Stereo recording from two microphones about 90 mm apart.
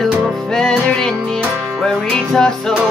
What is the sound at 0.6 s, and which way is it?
Music, 10° left (ahead or behind).